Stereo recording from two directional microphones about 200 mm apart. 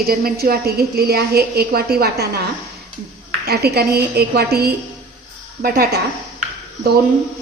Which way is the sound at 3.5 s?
50° right (ahead or behind).